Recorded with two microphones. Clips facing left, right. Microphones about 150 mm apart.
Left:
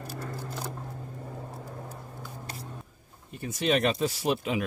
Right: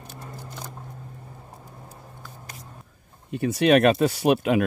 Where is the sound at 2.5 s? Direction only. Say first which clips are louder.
Left 3 dB; 30° left (ahead or behind).